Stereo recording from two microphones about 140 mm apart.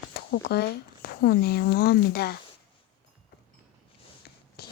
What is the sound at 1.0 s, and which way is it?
Speech, 90° left.